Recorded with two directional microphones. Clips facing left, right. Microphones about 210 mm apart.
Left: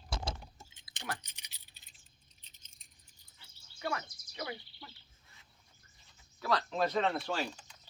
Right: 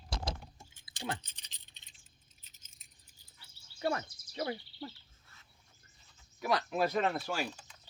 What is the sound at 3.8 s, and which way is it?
Speech, 30° right (ahead or behind).